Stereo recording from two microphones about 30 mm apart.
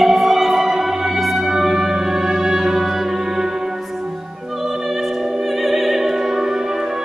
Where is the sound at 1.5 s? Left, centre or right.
Centre.